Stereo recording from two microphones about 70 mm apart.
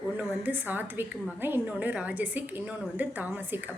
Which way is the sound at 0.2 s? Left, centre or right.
Right.